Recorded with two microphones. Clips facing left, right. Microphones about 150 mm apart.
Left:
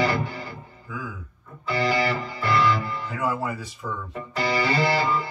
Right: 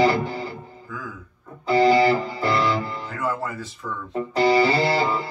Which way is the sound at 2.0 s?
30° right (ahead or behind).